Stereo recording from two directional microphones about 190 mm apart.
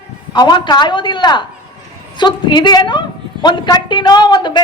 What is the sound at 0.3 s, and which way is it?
Speech, 20° left (ahead or behind).